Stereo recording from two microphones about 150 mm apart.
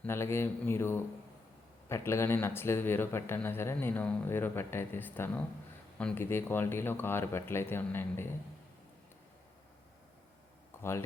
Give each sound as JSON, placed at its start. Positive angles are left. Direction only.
{"t": 0.0, "sound": "speech", "side_deg": 15}